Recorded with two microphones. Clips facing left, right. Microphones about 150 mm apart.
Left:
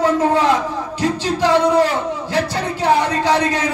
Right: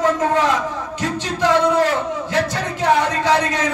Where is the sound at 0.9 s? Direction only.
35° left (ahead or behind).